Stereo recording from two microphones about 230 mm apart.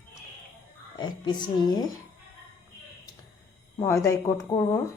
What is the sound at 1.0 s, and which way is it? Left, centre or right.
Speech, centre.